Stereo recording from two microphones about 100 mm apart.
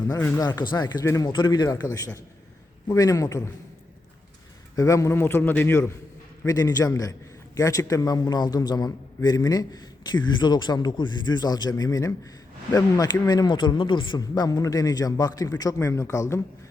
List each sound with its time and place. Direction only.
0.1 s a man's voice: 35° left (ahead or behind)
1.3 s a man's voice: 50° left (ahead or behind); by 3.5 s 30° left (ahead or behind)
4.7 s a man's voice: 30° left (ahead or behind)
6.4 s a man's voice: 35° left (ahead or behind); by 14.2 s 55° left (ahead or behind)
14.2 s a man's voice: 40° left (ahead or behind)